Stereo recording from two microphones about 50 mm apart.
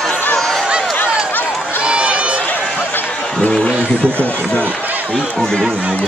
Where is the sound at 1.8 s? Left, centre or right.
Right.